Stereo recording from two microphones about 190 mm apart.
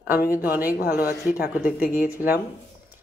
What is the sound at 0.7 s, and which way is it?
Speech, 55° left (ahead or behind).